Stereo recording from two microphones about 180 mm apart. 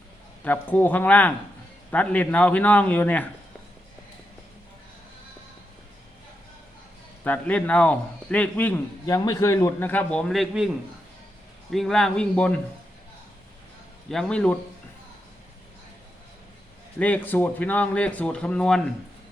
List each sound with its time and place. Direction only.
0.4 s a man's voice: 10° left (ahead or behind)
7.3 s a man's voice: 5° left (ahead or behind)
11.7 s speech: centre (ahead or behind)
14.1 s speech: 5° left (ahead or behind)
17.0 s a man's voice: 10° left (ahead or behind)